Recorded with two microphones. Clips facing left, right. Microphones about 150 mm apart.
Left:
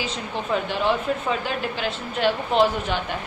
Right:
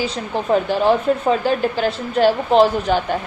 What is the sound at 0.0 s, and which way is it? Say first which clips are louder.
Speech: right 6 dB; 40° right (ahead or behind).